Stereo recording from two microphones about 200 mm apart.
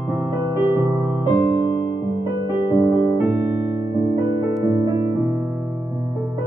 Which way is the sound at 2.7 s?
15° right (ahead or behind).